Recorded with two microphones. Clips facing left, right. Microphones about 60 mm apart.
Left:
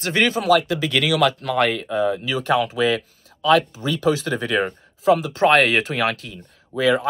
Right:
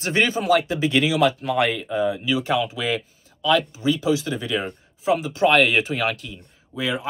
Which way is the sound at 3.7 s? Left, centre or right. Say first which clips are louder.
Even; centre.